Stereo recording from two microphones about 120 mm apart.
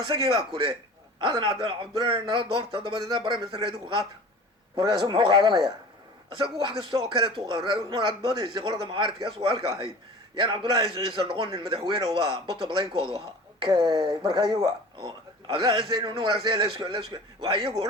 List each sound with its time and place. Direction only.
0.1 s a man's voice: 45° right (ahead or behind)